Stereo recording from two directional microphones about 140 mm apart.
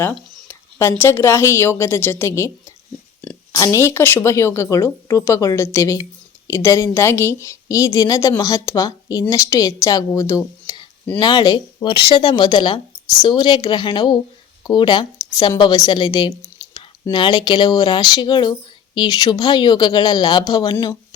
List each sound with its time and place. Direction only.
0.4 s a woman's voice: 15° left (ahead or behind)
3.5 s a woman's voice: 25° left (ahead or behind)